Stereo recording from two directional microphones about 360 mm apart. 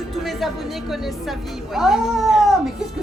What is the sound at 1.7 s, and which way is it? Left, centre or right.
Speech, centre.